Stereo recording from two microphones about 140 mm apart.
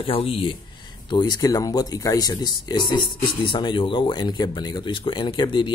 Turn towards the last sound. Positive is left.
turn(degrees=35)  # may be behind; listen again after turning